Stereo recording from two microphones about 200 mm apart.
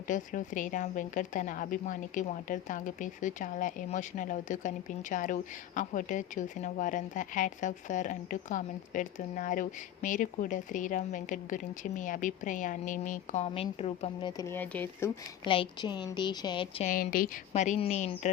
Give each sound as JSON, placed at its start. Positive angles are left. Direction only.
{"t": 0.1, "sound": "a woman's voice", "side_deg": 40}
{"t": 15.4, "sound": "a woman's voice", "side_deg": 25}
{"t": 16.8, "sound": "a woman's voice", "side_deg": 45}